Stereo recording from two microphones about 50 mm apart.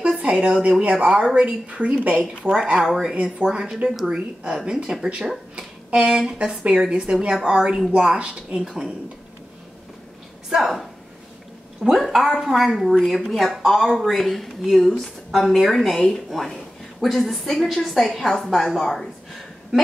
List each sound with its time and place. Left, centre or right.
0.0 s a woman's voice: right
2.6 s a woman's voice: centre
5.2 s a woman's voice: centre
10.5 s speech: centre
12.0 s speech: centre